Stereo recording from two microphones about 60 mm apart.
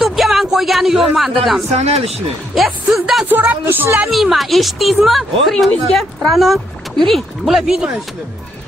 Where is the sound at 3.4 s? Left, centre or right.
Right.